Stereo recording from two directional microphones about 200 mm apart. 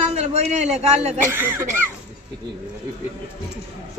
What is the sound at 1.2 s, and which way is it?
Speech, 10° right (ahead or behind).